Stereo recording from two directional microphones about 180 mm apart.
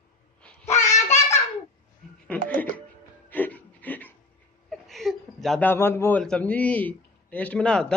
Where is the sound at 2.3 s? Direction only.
10° left (ahead or behind).